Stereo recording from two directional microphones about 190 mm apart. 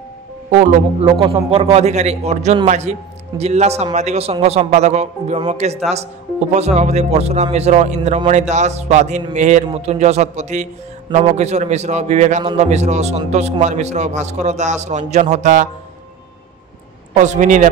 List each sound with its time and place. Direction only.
1.2 s a man's voice: 30° right (ahead or behind)
17.2 s a man's voice: 40° right (ahead or behind)